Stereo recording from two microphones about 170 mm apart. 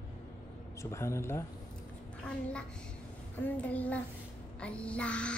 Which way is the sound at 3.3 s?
10° left (ahead or behind).